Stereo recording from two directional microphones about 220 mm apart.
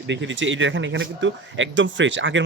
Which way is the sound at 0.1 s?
55° right (ahead or behind).